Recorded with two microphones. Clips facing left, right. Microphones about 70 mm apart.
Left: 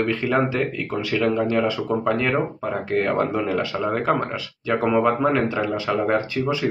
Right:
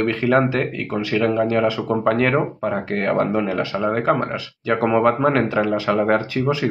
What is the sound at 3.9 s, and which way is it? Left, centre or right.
Speech, right.